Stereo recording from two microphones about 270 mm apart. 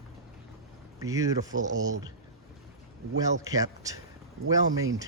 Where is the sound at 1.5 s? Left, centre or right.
Right.